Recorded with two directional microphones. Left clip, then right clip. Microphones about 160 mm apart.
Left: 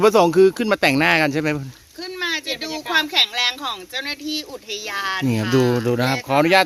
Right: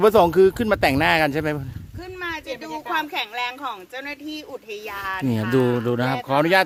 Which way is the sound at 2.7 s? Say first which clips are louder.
Right 2 dB; 5° right (ahead or behind).